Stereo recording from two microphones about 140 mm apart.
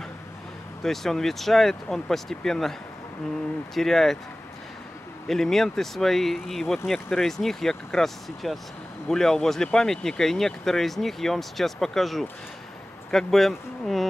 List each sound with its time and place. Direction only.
0.8 s speech: centre (ahead or behind)
3.7 s speech: centre (ahead or behind)
5.3 s speech: centre (ahead or behind)